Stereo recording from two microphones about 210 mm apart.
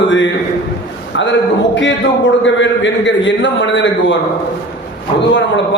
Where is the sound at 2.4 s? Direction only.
60° left (ahead or behind).